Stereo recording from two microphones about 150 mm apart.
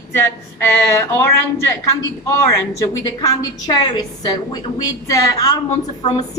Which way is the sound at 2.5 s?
20° left (ahead or behind).